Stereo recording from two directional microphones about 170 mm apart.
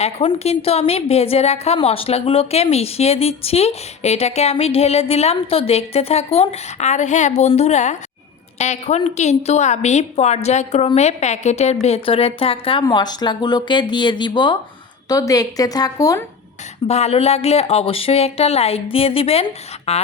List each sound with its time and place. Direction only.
0.0 s a woman's voice: 35° left (ahead or behind); by 16.2 s 20° left (ahead or behind)
16.8 s a woman's voice: 40° left (ahead or behind)